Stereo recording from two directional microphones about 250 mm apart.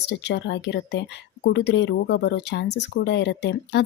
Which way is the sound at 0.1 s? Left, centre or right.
Left.